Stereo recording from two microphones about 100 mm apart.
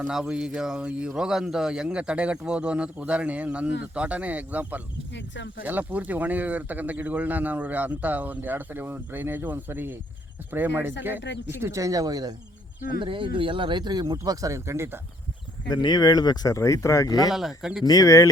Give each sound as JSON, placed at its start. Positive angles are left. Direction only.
{"t": 0.1, "sound": "a man's voice", "side_deg": -5}
{"t": 13.0, "sound": "speech", "side_deg": -55}
{"t": 15.7, "sound": "speech", "side_deg": 45}
{"t": 17.3, "sound": "speech", "side_deg": -5}
{"t": 17.8, "sound": "speech", "side_deg": 35}